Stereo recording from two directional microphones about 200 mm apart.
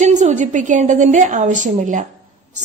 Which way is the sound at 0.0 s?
35° right (ahead or behind).